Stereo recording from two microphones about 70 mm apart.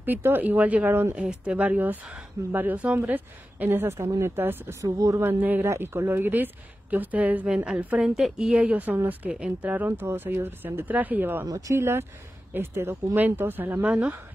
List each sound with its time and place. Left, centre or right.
0.0 s a woman's voice: right
1.4 s a woman's voice: centre
4.8 s speech: right
5.2 s a woman's voice: right
9.3 s a woman's voice: centre
9.8 s a woman's voice: right
11.5 s a woman's voice: right